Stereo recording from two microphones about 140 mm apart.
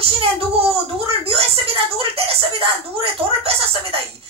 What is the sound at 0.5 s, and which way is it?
Speech, 45° right (ahead or behind).